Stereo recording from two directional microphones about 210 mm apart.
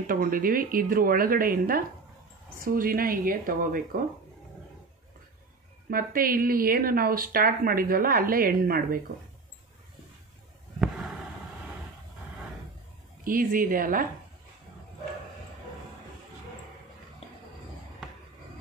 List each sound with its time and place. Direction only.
0.0 s a woman's voice: 40° right (ahead or behind)
5.9 s a woman's voice: 45° right (ahead or behind)
10.8 s fireworks: 5° right (ahead or behind)
13.2 s speech: 40° right (ahead or behind)